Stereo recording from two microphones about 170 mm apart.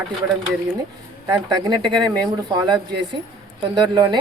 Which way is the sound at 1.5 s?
25° right (ahead or behind).